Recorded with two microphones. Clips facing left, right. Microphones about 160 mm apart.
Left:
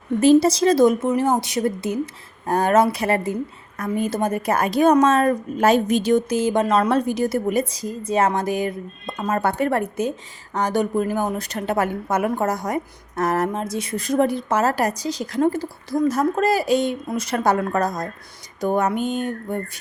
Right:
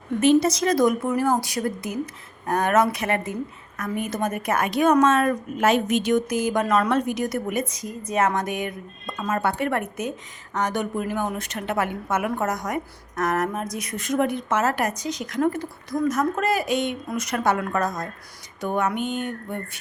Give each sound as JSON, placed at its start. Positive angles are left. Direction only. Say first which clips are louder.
{"t": 0.2, "sound": "a woman's voice", "louder": "left 4 dB", "side_deg": 35}